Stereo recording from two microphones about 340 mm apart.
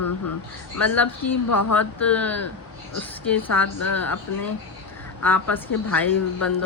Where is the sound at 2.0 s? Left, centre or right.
Centre.